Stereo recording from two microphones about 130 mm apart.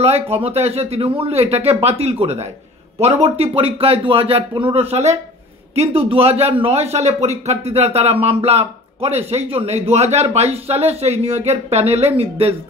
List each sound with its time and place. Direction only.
0.0 s a man's voice: 50° right (ahead or behind)